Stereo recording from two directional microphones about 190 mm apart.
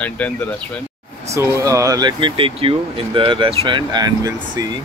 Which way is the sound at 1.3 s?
15° right (ahead or behind).